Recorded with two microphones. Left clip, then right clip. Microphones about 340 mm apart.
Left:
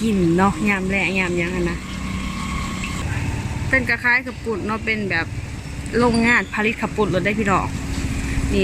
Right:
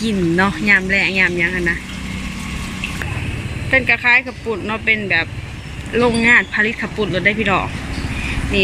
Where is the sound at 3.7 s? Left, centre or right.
Centre.